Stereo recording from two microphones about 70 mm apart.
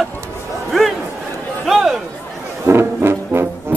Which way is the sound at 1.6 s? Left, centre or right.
Centre.